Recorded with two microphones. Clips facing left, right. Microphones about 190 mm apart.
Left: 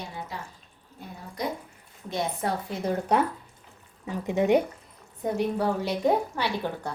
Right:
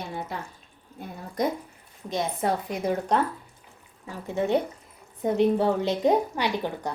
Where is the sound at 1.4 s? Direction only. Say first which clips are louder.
Right 5 dB; 45° right (ahead or behind).